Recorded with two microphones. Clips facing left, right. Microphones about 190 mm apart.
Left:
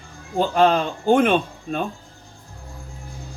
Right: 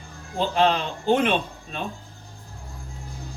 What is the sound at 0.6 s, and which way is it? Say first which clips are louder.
Speech: left 4 dB; 50° left (ahead or behind).